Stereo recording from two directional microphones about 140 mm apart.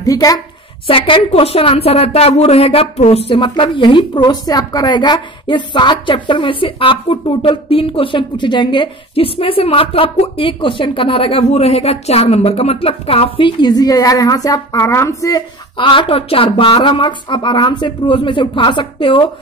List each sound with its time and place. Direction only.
0.0 s a woman's voice: 25° left (ahead or behind)
0.8 s a woman's voice: 40° left (ahead or behind)